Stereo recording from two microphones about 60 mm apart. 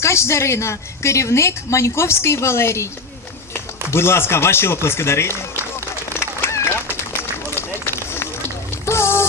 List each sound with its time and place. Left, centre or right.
0.0 s a woman's voice: left
6.0 s fowl: left
8.7 s a sound: left